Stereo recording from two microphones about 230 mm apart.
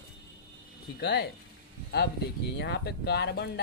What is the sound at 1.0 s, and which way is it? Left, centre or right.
Speech, left.